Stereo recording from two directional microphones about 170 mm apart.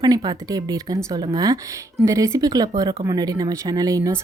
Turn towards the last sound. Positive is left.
turn(degrees=-20)  # may be behind; listen again after turning